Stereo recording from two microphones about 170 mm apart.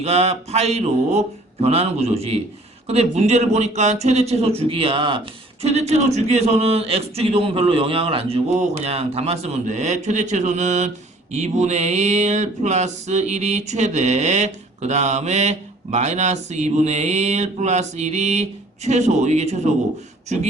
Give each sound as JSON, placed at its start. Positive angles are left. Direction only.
{"t": 0.0, "sound": "a man's voice", "side_deg": -40}